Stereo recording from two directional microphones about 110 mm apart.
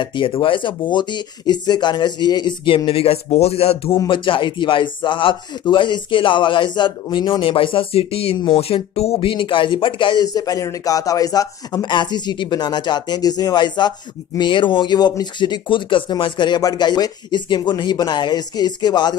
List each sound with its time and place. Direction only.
0.0 s speech: 50° left (ahead or behind)
4.1 s speech: 50° left (ahead or behind)